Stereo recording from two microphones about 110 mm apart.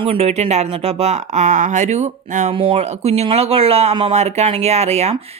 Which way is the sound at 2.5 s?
60° right (ahead or behind).